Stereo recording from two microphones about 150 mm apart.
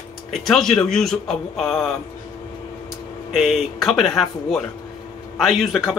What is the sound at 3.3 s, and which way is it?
A man's voice, centre (ahead or behind).